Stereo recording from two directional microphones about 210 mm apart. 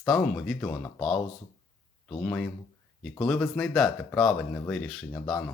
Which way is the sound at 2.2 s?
5° left (ahead or behind).